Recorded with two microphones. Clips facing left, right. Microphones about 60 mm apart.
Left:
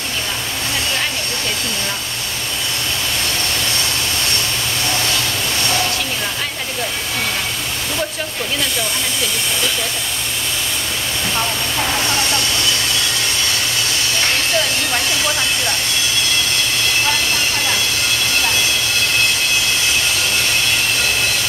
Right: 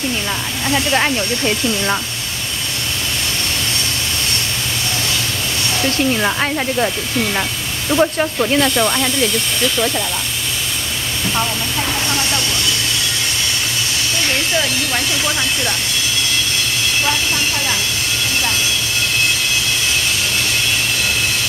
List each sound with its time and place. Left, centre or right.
8.0 s speech: right